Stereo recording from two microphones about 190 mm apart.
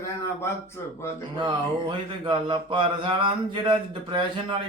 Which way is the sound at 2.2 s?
25° right (ahead or behind).